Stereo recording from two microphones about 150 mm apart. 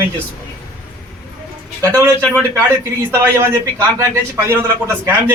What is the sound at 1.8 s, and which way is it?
A man's voice, 20° right (ahead or behind).